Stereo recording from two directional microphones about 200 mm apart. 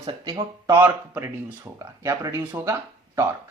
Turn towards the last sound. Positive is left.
turn(degrees=-15)  # may be behind; listen again after turning